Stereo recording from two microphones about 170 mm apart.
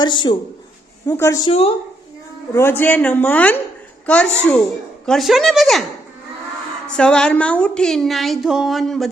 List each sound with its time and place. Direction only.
0.0 s a woman's voice: 25° left (ahead or behind)
1.5 s a woman's voice: 35° left (ahead or behind)
2.5 s a woman's voice: 15° left (ahead or behind)
6.8 s a woman's voice: 5° left (ahead or behind)